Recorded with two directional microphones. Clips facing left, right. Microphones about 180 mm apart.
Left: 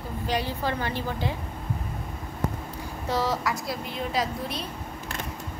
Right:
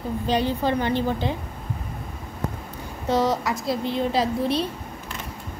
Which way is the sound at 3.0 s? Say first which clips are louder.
Right 5 dB; 20° right (ahead or behind).